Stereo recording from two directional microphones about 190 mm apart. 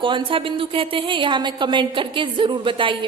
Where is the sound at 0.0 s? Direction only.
25° right (ahead or behind).